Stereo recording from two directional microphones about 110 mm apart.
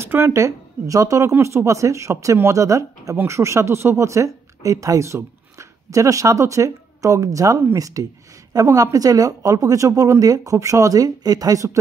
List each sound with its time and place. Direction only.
0.0 s a woman's voice: 25° right (ahead or behind)